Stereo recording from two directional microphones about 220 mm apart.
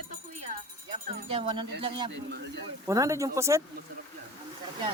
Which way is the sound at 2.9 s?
15° right (ahead or behind).